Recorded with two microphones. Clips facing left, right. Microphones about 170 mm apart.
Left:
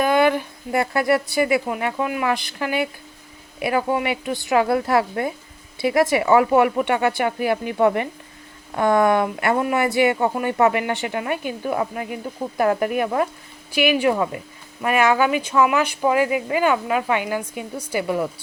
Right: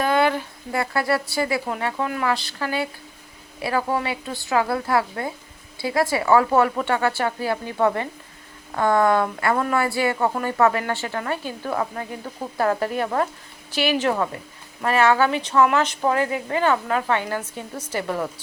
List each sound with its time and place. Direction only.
0.0 s speech: 15° left (ahead or behind)